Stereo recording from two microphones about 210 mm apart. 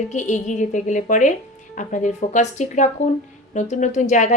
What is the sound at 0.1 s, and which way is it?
Speech, 35° left (ahead or behind).